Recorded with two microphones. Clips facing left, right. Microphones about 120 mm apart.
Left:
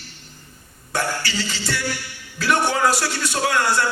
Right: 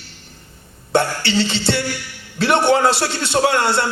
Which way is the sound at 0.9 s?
25° right (ahead or behind).